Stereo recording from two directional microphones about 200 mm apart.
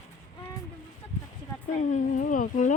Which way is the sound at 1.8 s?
40° left (ahead or behind).